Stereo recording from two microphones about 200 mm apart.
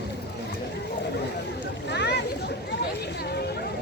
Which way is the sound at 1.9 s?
60° left (ahead or behind).